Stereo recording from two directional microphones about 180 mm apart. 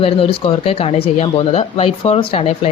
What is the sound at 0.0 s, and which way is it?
Speech, 30° left (ahead or behind).